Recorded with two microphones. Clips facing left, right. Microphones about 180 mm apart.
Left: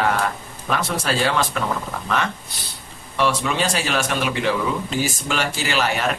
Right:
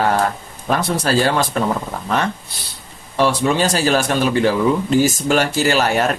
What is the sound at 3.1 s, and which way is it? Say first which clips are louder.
Speech: right 5 dB; 40° right (ahead or behind).